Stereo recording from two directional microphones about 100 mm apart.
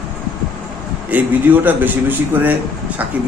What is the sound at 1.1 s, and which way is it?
A man's voice, 15° right (ahead or behind).